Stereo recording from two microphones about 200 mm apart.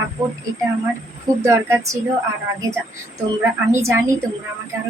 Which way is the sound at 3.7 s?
15° right (ahead or behind).